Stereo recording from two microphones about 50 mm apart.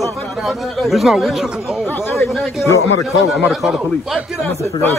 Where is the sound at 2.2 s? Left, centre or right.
Centre.